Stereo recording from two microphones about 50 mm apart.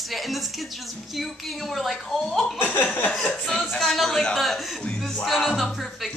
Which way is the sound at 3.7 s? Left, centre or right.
Centre.